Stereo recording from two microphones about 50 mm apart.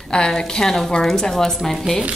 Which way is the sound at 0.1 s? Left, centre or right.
Centre.